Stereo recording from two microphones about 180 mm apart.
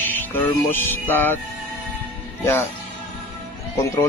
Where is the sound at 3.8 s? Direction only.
15° left (ahead or behind).